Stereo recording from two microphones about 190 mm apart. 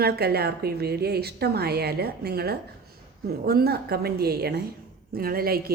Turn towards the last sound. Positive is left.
turn(degrees=-50)  # may be behind; listen again after turning